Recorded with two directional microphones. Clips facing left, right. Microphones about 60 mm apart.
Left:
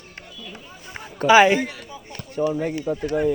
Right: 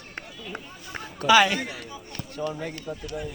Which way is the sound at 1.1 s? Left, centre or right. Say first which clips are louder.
Left 5 dB; left.